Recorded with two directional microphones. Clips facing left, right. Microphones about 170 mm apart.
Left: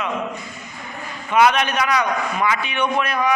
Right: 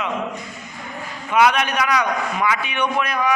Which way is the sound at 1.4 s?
10° right (ahead or behind).